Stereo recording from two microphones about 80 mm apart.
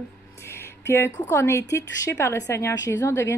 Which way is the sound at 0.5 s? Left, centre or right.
Left.